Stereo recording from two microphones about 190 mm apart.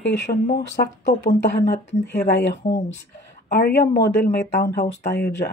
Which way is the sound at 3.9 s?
60° left (ahead or behind).